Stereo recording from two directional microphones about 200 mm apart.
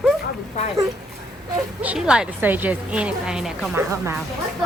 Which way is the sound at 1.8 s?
5° right (ahead or behind).